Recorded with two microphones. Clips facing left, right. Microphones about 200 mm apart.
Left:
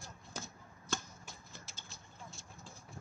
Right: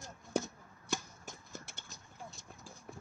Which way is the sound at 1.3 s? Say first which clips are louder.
Right 5 dB; 45° right (ahead or behind).